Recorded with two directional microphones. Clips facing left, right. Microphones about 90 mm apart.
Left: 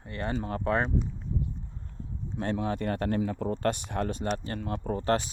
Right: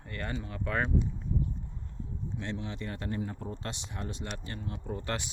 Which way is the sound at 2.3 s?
50° left (ahead or behind).